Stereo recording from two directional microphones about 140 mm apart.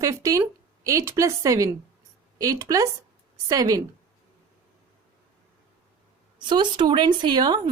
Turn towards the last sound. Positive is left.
turn(degrees=-30)  # may be behind; listen again after turning